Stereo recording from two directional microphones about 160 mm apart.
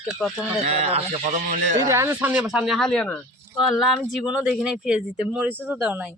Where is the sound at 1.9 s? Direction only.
15° right (ahead or behind).